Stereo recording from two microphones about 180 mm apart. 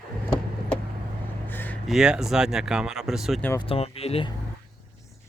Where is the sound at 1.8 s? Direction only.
5° right (ahead or behind).